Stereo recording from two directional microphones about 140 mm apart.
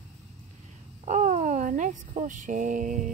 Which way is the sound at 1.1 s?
60° right (ahead or behind).